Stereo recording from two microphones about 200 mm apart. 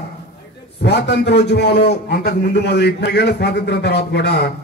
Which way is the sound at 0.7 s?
55° left (ahead or behind).